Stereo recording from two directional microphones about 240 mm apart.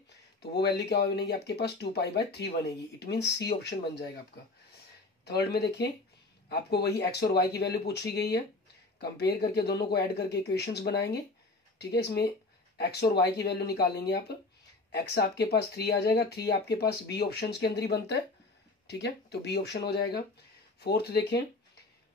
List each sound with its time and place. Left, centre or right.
0.4 s speech: left
5.2 s speech: left